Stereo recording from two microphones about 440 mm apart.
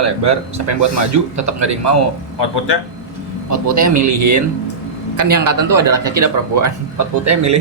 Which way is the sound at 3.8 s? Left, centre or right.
Right.